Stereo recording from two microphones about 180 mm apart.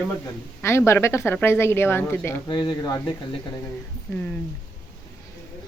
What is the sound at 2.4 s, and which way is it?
Speech, 25° left (ahead or behind).